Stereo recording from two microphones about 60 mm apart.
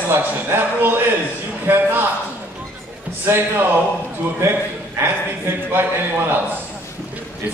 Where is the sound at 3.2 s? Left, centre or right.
Right.